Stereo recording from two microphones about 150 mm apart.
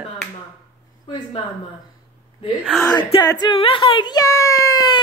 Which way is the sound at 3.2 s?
30° left (ahead or behind).